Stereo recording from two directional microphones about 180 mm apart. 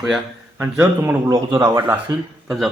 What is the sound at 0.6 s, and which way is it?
Speech, 15° right (ahead or behind).